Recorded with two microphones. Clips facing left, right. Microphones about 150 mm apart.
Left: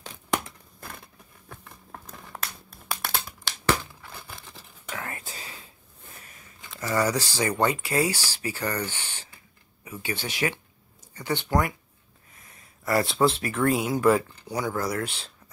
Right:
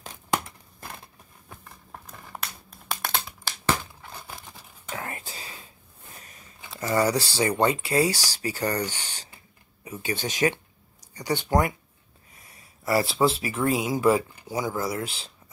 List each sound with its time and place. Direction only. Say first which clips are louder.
1.6 s a sound: even; 5° right (ahead or behind)
4.8 s whispering: right 1 dB; 25° right (ahead or behind)
6.7 s speech: right 2 dB; 25° right (ahead or behind)
8.3 s speech: right 2 dB; 35° right (ahead or behind)
8.9 s a sound: even; 35° right (ahead or behind)
10.0 s speech: right 4 dB; 40° right (ahead or behind)
11.1 s speech: right 2 dB; 15° right (ahead or behind)
12.8 s speech: even; 5° right (ahead or behind)